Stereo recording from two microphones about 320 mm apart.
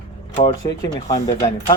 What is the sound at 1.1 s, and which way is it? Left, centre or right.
Speech, centre.